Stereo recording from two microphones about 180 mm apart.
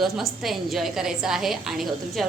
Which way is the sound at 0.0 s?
Centre (ahead or behind).